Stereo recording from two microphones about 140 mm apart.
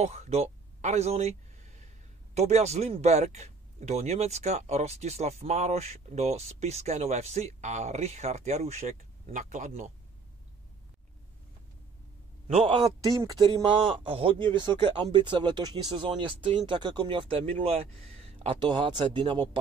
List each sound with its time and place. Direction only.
0.0 s a sound: 50° right (ahead or behind)
2.3 s speech: 50° right (ahead or behind)
12.4 s speech: 40° right (ahead or behind)
13.0 s speech: 25° right (ahead or behind)